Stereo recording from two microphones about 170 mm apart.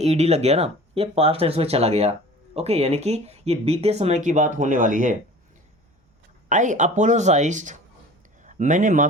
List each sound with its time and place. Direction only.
0.0 s speech: 40° right (ahead or behind)
6.5 s speech: 45° right (ahead or behind)